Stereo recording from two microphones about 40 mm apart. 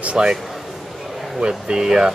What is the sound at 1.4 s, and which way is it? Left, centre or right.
Speech, centre.